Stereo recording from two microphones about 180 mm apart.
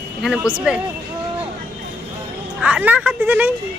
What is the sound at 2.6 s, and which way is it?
Speech, 5° right (ahead or behind).